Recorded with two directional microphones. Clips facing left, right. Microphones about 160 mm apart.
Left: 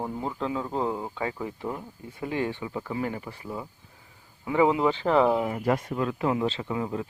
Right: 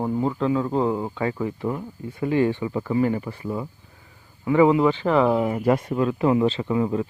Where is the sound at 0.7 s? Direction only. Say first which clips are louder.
Right 6 dB; 5° right (ahead or behind).